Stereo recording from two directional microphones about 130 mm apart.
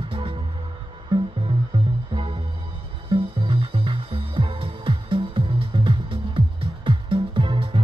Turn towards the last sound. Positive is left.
turn(degrees=-40)  # may be behind; listen again after turning